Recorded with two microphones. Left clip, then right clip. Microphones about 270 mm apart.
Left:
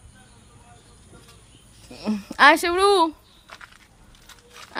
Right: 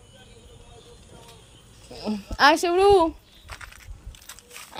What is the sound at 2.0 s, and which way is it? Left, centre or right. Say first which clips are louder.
Speech: left 3 dB; centre.